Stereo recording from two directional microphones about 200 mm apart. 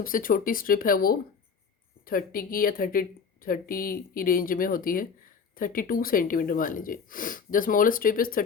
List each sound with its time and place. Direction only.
0.0 s a woman's voice: 45° left (ahead or behind)